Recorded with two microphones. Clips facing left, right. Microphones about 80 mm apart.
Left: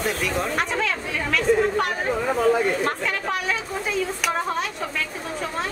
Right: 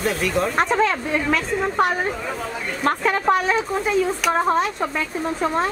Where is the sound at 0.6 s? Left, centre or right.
Right.